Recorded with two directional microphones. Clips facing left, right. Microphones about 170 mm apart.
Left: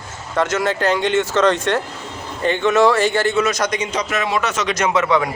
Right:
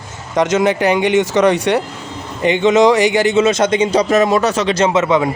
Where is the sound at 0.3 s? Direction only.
20° right (ahead or behind).